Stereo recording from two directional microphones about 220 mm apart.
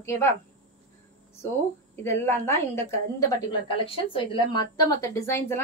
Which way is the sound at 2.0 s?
10° left (ahead or behind).